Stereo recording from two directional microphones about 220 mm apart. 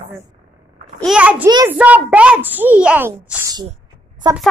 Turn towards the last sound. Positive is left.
turn(degrees=-20)  # may be behind; listen again after turning